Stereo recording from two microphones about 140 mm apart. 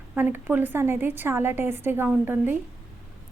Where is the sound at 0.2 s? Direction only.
15° right (ahead or behind).